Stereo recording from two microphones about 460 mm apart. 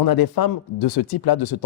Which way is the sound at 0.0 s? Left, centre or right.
Left.